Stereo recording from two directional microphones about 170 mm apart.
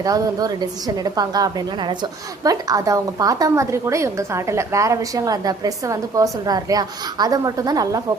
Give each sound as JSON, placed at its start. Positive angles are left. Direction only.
{"t": 0.0, "sound": "a woman's voice", "side_deg": -20}